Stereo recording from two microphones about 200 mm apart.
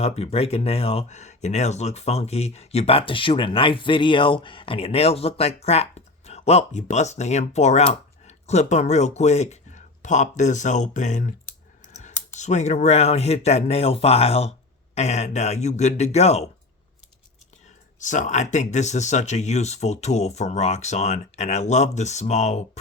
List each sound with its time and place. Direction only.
0.0 s speech: 30° left (ahead or behind)
12.4 s speech: 35° left (ahead or behind)
18.0 s speech: 40° left (ahead or behind)